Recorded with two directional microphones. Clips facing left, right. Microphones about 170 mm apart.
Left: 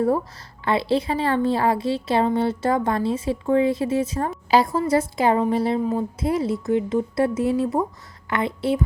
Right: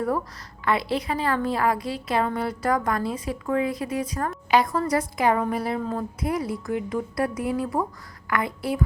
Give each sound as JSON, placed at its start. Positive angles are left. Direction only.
{"t": 0.6, "sound": "a woman's voice", "side_deg": 30}